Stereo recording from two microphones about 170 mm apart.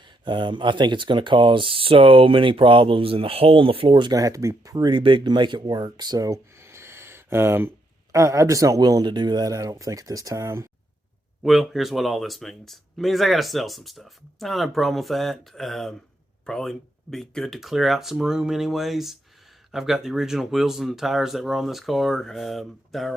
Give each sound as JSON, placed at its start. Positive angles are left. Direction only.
{"t": 0.3, "sound": "speech", "side_deg": -30}
{"t": 11.4, "sound": "speech", "side_deg": 0}